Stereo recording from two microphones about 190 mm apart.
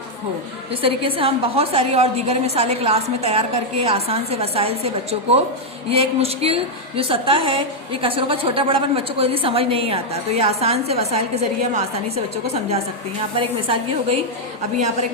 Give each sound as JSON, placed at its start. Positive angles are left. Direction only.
{"t": 0.8, "sound": "a woman's voice", "side_deg": -30}
{"t": 5.9, "sound": "a woman's voice", "side_deg": -30}
{"t": 13.3, "sound": "a woman's voice", "side_deg": -30}